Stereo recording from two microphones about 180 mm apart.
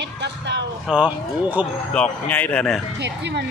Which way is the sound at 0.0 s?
70° right (ahead or behind).